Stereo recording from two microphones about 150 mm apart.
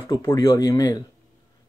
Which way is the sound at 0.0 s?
20° left (ahead or behind).